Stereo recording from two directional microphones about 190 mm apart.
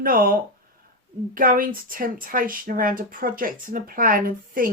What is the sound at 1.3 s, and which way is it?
Speech, 45° right (ahead or behind).